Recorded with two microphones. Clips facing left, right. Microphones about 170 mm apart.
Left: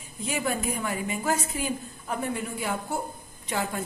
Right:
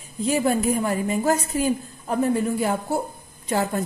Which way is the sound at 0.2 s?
35° right (ahead or behind).